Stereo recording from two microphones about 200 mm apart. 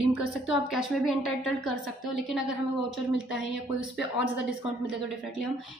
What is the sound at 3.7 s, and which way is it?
Speech, 65° left (ahead or behind).